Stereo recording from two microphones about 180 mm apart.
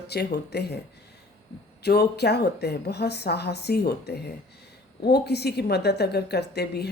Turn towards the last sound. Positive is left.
turn(degrees=65)  # may be behind; listen again after turning